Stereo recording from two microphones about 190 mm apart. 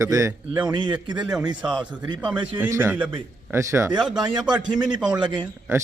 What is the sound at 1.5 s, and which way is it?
Speech, 25° right (ahead or behind).